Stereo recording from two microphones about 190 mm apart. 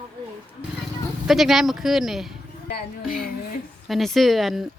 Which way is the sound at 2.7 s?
45° left (ahead or behind).